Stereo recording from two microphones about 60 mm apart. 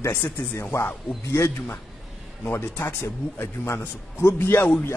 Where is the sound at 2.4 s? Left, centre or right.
Left.